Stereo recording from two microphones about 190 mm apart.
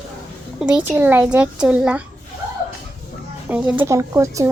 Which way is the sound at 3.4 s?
10° right (ahead or behind).